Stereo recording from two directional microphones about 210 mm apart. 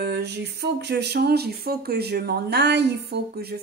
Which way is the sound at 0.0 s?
50° right (ahead or behind).